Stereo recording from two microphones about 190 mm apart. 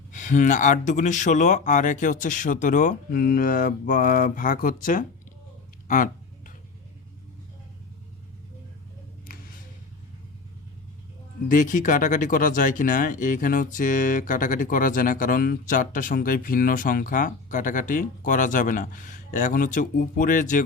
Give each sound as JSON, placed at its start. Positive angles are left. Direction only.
{"t": 0.1, "sound": "speech", "side_deg": 40}
{"t": 11.4, "sound": "speech", "side_deg": 45}